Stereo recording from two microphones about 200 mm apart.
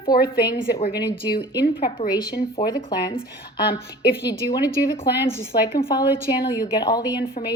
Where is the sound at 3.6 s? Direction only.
50° left (ahead or behind).